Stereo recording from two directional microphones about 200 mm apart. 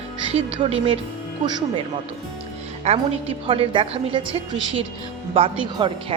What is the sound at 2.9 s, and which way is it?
Music, 30° right (ahead or behind).